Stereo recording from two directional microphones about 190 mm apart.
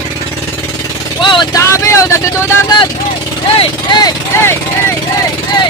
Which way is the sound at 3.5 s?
20° left (ahead or behind).